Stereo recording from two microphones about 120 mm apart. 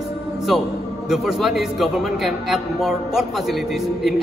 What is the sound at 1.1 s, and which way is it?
A man's voice, centre (ahead or behind).